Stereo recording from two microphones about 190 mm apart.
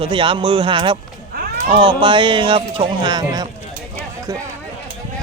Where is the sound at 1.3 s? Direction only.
50° right (ahead or behind).